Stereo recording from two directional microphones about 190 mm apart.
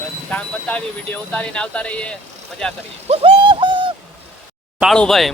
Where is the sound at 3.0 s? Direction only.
25° right (ahead or behind).